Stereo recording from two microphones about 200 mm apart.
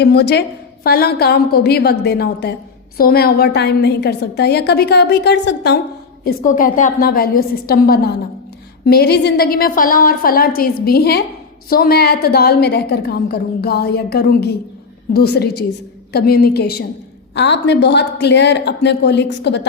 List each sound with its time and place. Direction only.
0.0 s a woman's voice: 55° left (ahead or behind)
6.2 s a woman's voice: 40° left (ahead or behind); by 19.6 s 60° left (ahead or behind)